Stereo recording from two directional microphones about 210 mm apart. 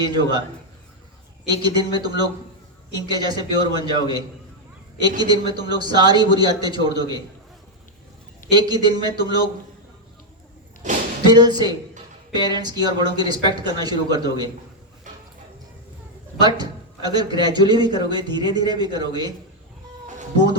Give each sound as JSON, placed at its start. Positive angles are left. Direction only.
{"t": 0.0, "sound": "a man's voice", "side_deg": -20}
{"t": 1.5, "sound": "a man's voice", "side_deg": -20}
{"t": 5.2, "sound": "a man's voice", "side_deg": -20}
{"t": 8.4, "sound": "a man's voice", "side_deg": -20}
{"t": 10.8, "sound": "a sound", "side_deg": -35}
{"t": 11.3, "sound": "a man's voice", "side_deg": -20}
{"t": 16.4, "sound": "a man's voice", "side_deg": -20}